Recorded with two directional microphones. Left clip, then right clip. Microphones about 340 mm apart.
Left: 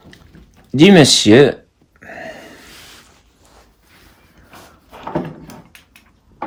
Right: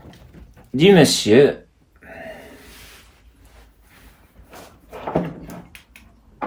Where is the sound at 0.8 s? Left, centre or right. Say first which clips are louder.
Left 4 dB; left.